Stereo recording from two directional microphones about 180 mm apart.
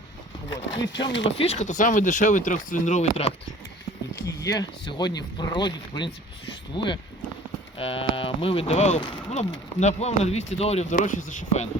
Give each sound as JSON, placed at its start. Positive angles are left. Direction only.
{"t": 0.8, "sound": "speech", "side_deg": 85}
{"t": 1.4, "sound": "speech", "side_deg": 35}
{"t": 4.4, "sound": "speech", "side_deg": 20}